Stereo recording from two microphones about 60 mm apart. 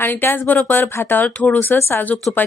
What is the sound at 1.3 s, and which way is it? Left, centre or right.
Speech, left.